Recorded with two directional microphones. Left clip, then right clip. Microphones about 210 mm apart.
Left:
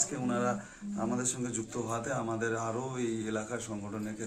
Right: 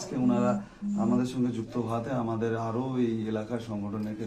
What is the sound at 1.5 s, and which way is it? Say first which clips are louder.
A man's voice: right 3 dB; centre (ahead or behind).